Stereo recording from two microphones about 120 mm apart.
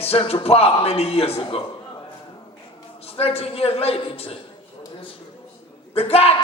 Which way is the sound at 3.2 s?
55° left (ahead or behind).